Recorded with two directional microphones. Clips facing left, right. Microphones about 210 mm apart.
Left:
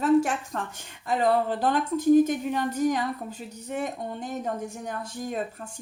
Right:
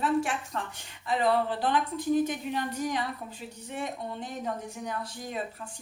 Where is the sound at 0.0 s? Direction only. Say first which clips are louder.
Left 6 dB; 45° left (ahead or behind).